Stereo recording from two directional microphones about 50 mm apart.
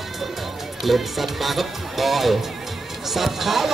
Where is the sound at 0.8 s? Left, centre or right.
Centre.